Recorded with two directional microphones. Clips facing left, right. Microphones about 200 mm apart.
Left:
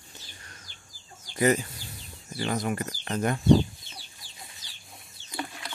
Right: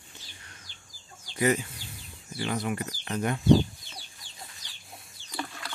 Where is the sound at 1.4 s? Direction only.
40° left (ahead or behind).